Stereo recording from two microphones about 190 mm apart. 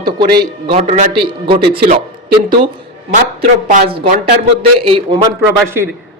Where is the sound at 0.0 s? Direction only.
20° right (ahead or behind).